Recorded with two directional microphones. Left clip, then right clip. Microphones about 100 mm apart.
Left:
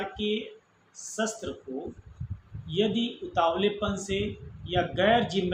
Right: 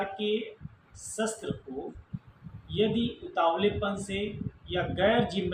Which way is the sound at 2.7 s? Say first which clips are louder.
Left 1 dB; 30° left (ahead or behind).